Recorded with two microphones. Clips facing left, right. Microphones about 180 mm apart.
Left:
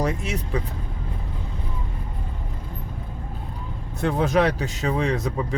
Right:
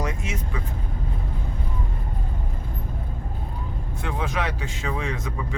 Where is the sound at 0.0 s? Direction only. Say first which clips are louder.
Left 4 dB; 35° left (ahead or behind).